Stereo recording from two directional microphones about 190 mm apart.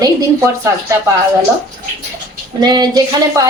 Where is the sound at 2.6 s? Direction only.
20° right (ahead or behind).